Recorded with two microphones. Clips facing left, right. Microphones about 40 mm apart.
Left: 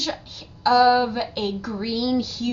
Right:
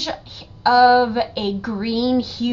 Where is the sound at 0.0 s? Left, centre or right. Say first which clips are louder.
Right 1 dB; right.